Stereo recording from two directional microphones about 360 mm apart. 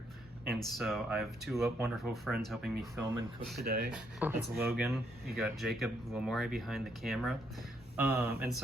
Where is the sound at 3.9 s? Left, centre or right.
Centre.